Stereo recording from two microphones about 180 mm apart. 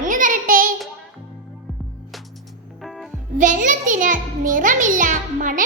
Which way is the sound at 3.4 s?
45° right (ahead or behind).